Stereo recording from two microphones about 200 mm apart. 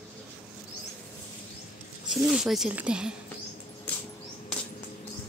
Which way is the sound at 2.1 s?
Centre (ahead or behind).